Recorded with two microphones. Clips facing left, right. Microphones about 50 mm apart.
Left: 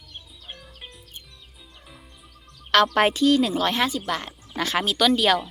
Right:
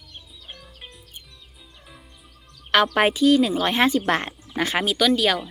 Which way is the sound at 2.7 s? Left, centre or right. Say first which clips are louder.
Even; centre.